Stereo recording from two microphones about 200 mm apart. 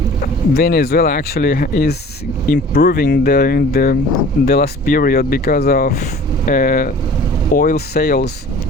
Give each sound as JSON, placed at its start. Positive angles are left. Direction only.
{"t": 0.5, "sound": "speech", "side_deg": 50}